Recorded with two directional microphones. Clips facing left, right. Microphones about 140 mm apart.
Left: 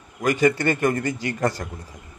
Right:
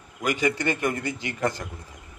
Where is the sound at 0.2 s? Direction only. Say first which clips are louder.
Left 5 dB; 45° left (ahead or behind).